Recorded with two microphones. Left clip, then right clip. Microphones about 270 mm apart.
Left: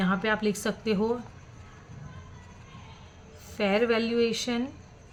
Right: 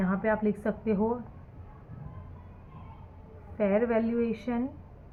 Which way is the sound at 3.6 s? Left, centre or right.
Left.